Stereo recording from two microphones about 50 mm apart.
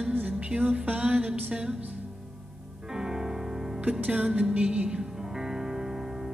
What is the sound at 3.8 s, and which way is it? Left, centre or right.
Music, right.